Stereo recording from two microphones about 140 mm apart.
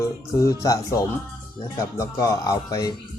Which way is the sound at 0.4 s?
25° left (ahead or behind).